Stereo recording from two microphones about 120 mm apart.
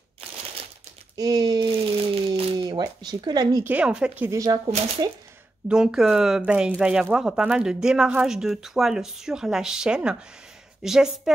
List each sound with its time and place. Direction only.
1.1 s speech: 30° right (ahead or behind)
2.0 s a sound: 50° right (ahead or behind)
2.6 s speech: 35° right (ahead or behind)
3.6 s speech: 10° right (ahead or behind)
4.3 s speech: 30° right (ahead or behind)
5.7 s speech: 5° right (ahead or behind)